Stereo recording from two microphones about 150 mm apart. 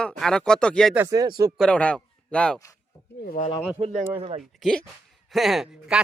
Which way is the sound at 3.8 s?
45° right (ahead or behind).